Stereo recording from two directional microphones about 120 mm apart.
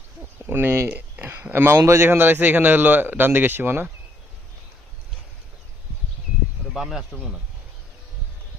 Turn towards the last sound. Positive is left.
turn(degrees=0)  # may be behind; listen again after turning